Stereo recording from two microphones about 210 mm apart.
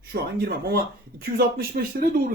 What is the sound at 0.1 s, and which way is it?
Speech, 50° right (ahead or behind).